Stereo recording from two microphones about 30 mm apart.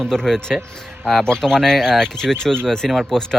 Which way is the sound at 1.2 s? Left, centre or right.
Left.